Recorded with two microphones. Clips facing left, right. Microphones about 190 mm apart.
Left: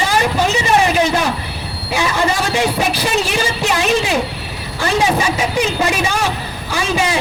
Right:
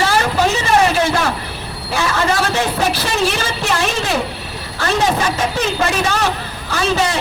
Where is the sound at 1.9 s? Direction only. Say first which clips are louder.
Even; 15° left (ahead or behind).